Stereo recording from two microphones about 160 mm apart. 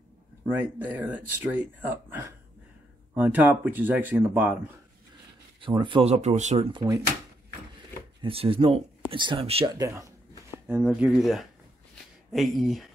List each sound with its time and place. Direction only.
0.5 s speech: 10° right (ahead or behind)
5.6 s speech: 30° right (ahead or behind); by 6.7 s 45° right (ahead or behind)
6.7 s speech: 20° right (ahead or behind)
8.2 s speech: 35° right (ahead or behind)
9.8 s speech: 20° right (ahead or behind)
10.7 s speech: 5° right (ahead or behind)